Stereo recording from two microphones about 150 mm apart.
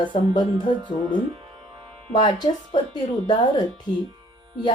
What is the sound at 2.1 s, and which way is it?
Speech, 35° left (ahead or behind).